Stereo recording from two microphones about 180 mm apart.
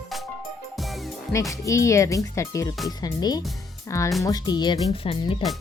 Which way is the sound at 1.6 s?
15° left (ahead or behind).